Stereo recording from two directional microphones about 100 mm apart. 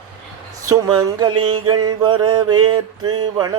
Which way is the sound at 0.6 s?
35° right (ahead or behind).